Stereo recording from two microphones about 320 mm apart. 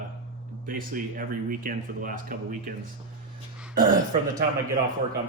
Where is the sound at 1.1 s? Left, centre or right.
Right.